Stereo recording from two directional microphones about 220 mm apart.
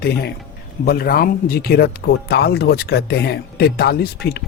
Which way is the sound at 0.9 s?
45° left (ahead or behind).